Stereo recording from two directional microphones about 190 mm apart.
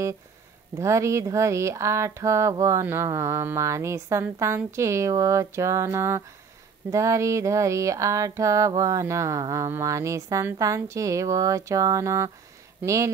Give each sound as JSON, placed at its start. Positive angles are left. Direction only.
{"t": 0.7, "sound": "speech", "side_deg": -15}